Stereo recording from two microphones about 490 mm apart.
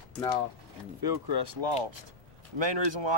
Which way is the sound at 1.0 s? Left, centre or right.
Right.